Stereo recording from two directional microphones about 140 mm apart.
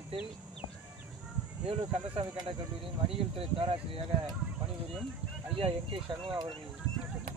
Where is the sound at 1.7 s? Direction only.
35° right (ahead or behind).